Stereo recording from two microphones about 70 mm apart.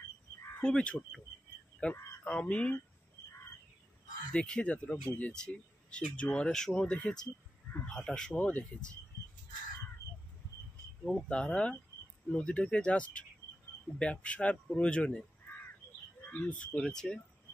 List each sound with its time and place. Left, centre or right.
0.6 s speech: centre
4.3 s speech: centre
11.1 s speech: centre
16.3 s speech: left